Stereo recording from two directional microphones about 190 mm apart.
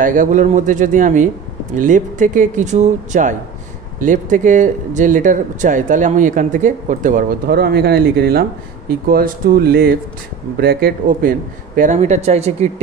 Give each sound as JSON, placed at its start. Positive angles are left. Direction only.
{"t": 0.0, "sound": "speech", "side_deg": -45}